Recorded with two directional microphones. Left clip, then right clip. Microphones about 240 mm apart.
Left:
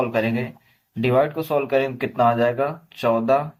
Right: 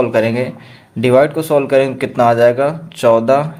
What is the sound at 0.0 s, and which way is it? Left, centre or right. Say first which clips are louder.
Speech: right 8 dB; right.